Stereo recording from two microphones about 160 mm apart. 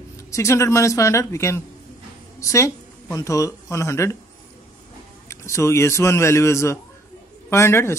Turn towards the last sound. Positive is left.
turn(degrees=15)  # may be behind; listen again after turning